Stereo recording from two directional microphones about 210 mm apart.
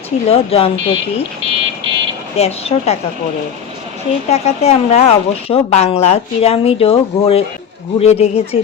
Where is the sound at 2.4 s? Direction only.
30° left (ahead or behind).